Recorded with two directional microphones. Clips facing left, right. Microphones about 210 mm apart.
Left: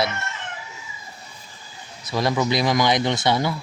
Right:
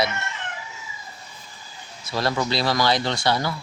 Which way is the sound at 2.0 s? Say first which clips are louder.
Left 2 dB; 20° left (ahead or behind).